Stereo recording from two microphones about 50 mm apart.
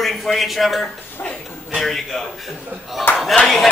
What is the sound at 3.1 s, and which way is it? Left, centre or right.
Speech, left.